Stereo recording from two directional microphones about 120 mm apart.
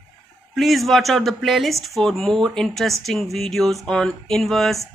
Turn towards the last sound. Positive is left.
turn(degrees=0)  # may be behind; listen again after turning